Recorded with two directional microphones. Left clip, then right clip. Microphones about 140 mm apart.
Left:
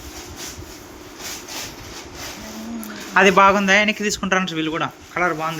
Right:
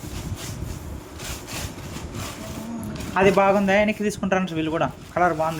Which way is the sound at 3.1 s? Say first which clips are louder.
Left 5 dB; 5° right (ahead or behind).